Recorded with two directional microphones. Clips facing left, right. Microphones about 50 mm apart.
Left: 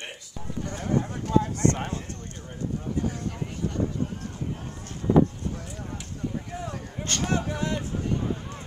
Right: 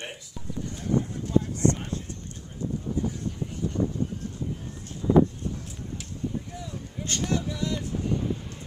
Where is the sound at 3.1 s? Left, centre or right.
Left.